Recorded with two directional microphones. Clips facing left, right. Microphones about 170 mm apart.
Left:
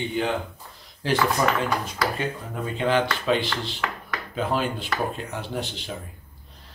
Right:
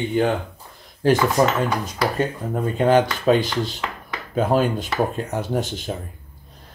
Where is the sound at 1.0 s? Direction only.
45° right (ahead or behind).